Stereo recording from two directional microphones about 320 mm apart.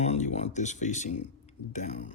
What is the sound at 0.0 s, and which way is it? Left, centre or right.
Speech, left.